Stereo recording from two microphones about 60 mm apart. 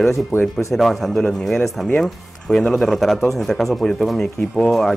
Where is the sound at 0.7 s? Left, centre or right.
Centre.